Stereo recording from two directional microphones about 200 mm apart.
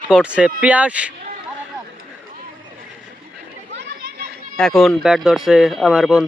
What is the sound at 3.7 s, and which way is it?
Children playing, 60° right (ahead or behind).